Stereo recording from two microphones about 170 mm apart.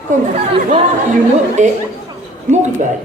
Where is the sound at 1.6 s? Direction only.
45° right (ahead or behind).